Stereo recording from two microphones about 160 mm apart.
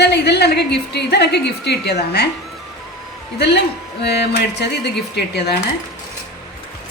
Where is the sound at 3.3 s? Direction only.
90° left.